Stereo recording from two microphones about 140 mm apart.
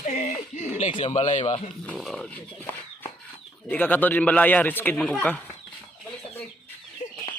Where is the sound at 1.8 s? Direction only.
Centre (ahead or behind).